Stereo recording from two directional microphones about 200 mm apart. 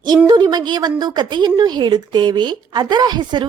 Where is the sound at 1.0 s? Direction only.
20° right (ahead or behind).